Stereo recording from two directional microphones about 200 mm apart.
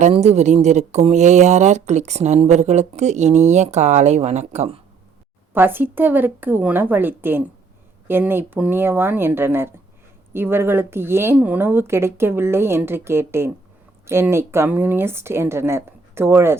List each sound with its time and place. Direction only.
0.0 s speech: 35° right (ahead or behind)
5.5 s speech: 10° right (ahead or behind)